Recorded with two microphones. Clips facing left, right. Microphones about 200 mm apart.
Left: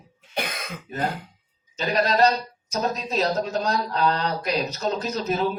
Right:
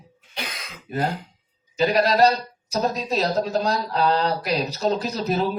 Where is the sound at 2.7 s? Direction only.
35° right (ahead or behind).